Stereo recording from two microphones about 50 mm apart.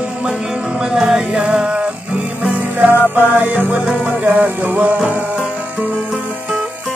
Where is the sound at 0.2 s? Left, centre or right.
Centre.